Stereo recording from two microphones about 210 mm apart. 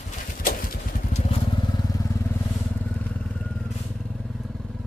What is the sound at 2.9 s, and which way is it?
Vehicle, 5° left (ahead or behind).